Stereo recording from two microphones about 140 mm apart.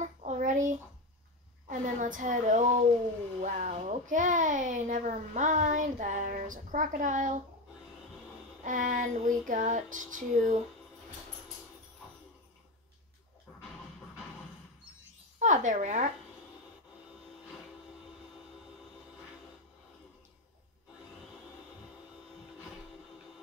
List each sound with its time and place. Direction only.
0.0 s a sound: 60° right (ahead or behind)
1.7 s a child's voice: 70° right (ahead or behind)
8.6 s female singing: 70° right (ahead or behind)
15.3 s speech: 60° right (ahead or behind)